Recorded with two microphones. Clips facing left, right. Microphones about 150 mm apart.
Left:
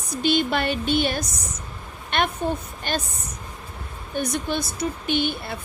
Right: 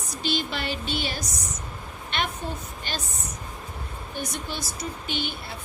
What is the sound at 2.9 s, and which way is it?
Speech, 50° left (ahead or behind).